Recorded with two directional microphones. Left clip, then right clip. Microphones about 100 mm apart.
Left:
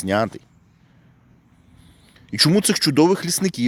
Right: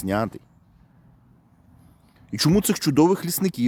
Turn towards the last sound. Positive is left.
turn(degrees=-25)  # may be behind; listen again after turning